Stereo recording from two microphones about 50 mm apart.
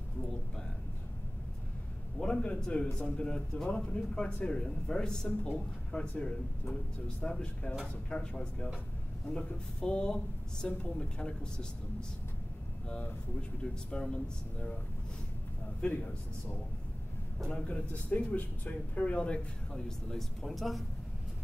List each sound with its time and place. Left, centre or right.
2.1 s speech: centre
9.8 s speech: centre
13.4 s speech: centre
15.8 s speech: left
17.5 s speech: left
20.1 s speech: centre